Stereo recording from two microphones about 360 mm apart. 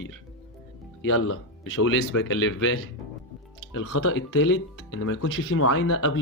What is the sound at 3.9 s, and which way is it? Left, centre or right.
Speech, left.